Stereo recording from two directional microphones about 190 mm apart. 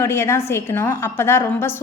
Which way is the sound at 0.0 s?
15° left (ahead or behind).